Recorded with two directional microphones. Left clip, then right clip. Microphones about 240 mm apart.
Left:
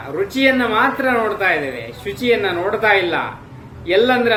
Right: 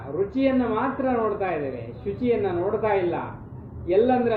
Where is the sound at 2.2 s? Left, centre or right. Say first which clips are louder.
Left 7 dB; centre.